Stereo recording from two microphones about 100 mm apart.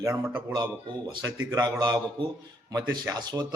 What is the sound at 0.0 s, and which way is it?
Speech, 30° right (ahead or behind).